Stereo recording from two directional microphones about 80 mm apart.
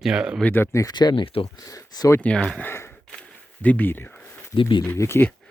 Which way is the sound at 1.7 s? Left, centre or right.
Left.